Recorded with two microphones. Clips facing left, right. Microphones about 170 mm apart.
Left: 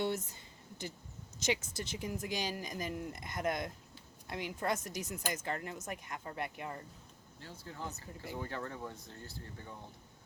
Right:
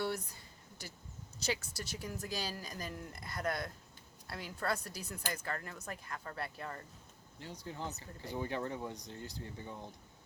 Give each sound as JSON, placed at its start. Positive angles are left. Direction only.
{"t": 1.4, "sound": "a woman's voice", "side_deg": 20}
{"t": 7.3, "sound": "speech", "side_deg": -15}